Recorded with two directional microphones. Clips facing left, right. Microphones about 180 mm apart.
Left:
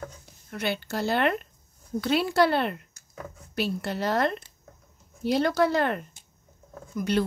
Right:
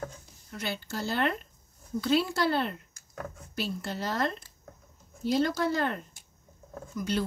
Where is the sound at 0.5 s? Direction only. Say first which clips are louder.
Left 6 dB; 65° left (ahead or behind).